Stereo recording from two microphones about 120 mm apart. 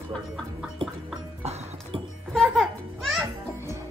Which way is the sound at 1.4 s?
60° right (ahead or behind).